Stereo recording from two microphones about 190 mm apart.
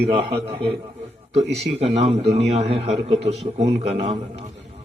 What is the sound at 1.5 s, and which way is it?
A man's voice, 35° right (ahead or behind).